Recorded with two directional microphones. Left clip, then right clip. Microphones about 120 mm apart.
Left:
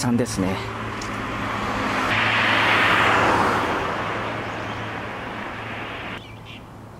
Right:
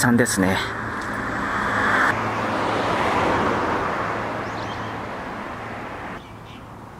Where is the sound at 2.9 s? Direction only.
40° left (ahead or behind).